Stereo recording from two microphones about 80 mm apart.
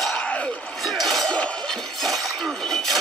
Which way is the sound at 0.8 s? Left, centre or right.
Centre.